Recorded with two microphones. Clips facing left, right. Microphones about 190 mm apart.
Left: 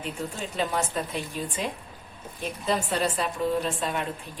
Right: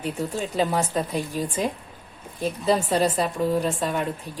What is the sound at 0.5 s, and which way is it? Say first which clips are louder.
Speech: right 4 dB; 35° right (ahead or behind).